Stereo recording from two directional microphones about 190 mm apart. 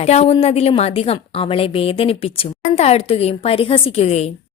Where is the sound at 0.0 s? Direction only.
35° left (ahead or behind).